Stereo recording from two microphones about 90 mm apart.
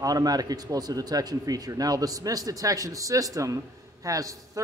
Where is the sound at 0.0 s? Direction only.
45° right (ahead or behind).